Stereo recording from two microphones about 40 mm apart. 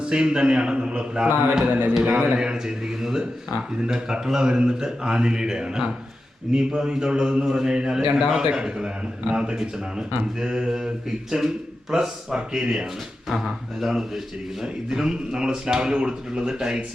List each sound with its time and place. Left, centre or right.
0.0 s a man's voice: right
14.6 s speech: centre